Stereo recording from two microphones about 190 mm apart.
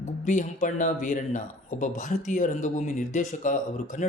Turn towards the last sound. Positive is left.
turn(degrees=40)  # may be behind; listen again after turning